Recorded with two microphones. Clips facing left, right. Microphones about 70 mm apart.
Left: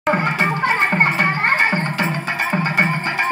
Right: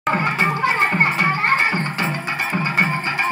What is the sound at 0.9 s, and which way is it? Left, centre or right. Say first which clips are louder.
Music: left 1 dB; left.